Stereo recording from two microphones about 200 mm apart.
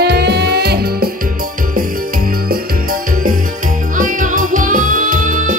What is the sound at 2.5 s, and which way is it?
Music, 45° right (ahead or behind).